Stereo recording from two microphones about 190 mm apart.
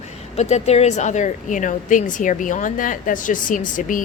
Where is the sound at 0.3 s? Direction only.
35° left (ahead or behind).